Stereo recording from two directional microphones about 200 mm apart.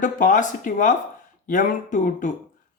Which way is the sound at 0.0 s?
40° left (ahead or behind).